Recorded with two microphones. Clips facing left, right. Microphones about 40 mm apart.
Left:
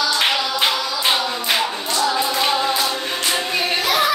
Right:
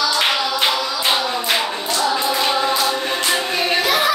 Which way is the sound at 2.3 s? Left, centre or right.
Centre.